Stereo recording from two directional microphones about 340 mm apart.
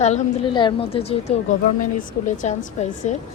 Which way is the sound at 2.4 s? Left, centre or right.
Left.